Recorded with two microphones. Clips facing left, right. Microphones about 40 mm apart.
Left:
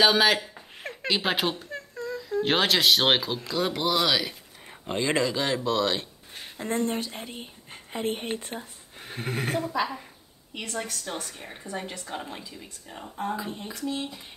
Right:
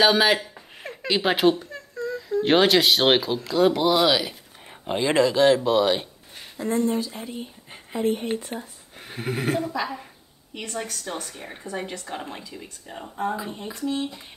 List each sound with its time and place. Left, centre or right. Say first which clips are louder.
0.0 s speech: right 2 dB; centre
2.0 s humming: right 4 dB; centre
2.4 s speech: right 5 dB; centre
6.6 s speech: right 4 dB; left
9.0 s speech: right 4 dB; centre